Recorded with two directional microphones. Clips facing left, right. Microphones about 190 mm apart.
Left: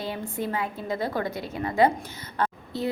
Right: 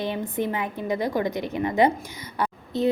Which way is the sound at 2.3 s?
20° right (ahead or behind).